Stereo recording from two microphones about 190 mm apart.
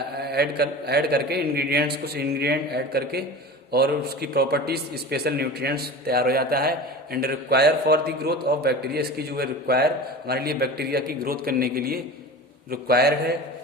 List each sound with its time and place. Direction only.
0.2 s a man's voice: 55° right (ahead or behind)